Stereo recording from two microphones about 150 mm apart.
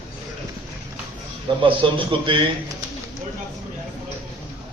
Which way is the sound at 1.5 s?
35° right (ahead or behind).